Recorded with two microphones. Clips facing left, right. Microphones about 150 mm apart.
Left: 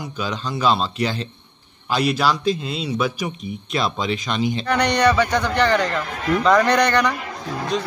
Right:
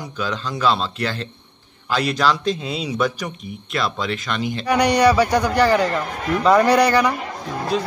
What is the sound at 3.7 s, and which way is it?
Speech, 20° left (ahead or behind).